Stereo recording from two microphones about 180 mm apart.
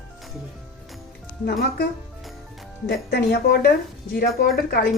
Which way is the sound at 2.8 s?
65° left (ahead or behind).